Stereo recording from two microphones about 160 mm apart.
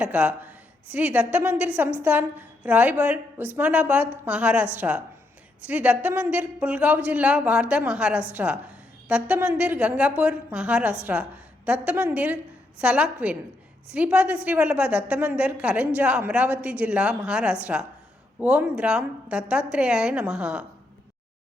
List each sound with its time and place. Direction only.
0.0 s a woman's voice: 10° right (ahead or behind)